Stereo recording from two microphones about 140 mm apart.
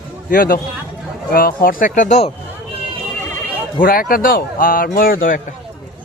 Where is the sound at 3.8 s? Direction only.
90° left.